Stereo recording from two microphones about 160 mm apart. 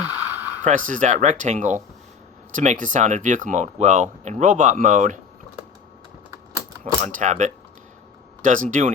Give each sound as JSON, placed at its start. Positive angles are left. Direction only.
{"t": 0.0, "sound": "a sound", "side_deg": -10}
{"t": 0.6, "sound": "speech", "side_deg": -50}
{"t": 6.8, "sound": "speech", "side_deg": -50}